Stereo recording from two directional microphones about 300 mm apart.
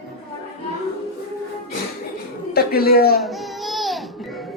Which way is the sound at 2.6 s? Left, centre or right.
Left.